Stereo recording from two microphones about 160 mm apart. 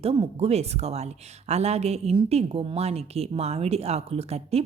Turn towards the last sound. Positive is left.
turn(degrees=-40)  # may be behind; listen again after turning